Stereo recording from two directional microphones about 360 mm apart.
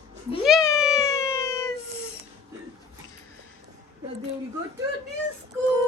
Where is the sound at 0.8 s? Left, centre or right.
Centre.